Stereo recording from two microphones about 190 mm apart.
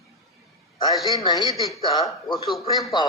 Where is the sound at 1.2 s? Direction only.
20° left (ahead or behind).